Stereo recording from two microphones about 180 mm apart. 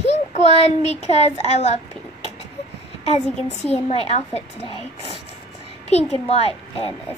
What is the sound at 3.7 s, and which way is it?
A child's voice, 35° left (ahead or behind).